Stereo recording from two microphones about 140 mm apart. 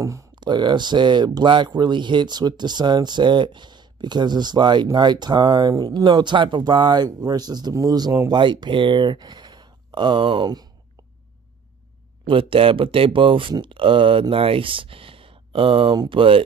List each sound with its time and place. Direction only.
0.0 s speech: 25° right (ahead or behind)
12.3 s speech: 40° right (ahead or behind)